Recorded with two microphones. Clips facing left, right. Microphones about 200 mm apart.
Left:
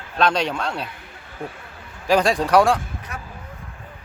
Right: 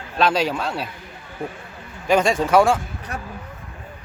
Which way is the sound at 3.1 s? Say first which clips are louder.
Right 5 dB; 35° right (ahead or behind).